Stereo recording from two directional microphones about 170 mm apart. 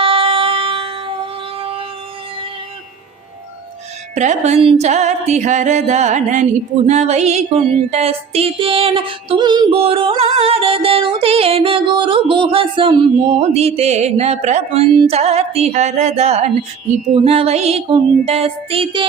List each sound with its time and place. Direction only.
0.0 s a sound: 30° right (ahead or behind)
4.1 s music: 45° right (ahead or behind)
6.8 s female singing: 40° right (ahead or behind)